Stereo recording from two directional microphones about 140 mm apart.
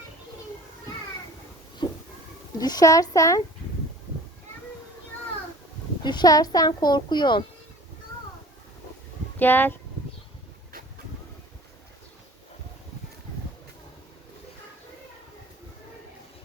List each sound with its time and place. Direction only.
1.8 s a sound: 35° left (ahead or behind)
2.6 s speech: 30° left (ahead or behind)
6.0 s speech: 30° left (ahead or behind)
9.4 s speech: 15° left (ahead or behind)